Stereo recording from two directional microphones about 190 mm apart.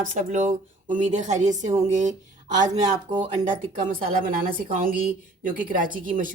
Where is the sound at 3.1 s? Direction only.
25° right (ahead or behind).